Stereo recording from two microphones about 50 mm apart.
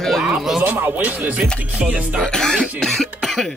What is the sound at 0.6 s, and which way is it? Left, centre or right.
Speech, right.